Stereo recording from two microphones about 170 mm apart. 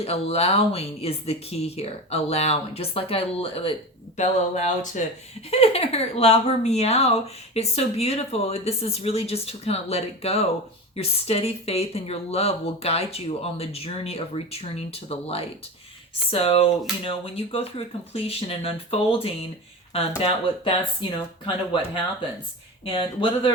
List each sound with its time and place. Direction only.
0.0 s speech: 35° left (ahead or behind)
4.2 s speech: 45° left (ahead or behind)
22.9 s speech: 30° left (ahead or behind)